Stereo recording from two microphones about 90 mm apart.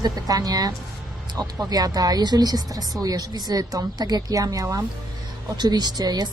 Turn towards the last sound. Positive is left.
turn(degrees=-45)  # may be behind; listen again after turning